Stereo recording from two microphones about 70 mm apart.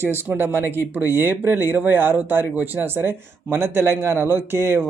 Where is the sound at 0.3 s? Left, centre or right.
Right.